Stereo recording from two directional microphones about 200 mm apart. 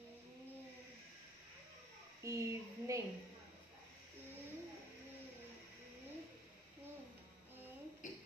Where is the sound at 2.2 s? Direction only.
15° right (ahead or behind).